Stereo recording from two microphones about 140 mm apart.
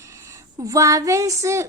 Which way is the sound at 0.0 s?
20° right (ahead or behind).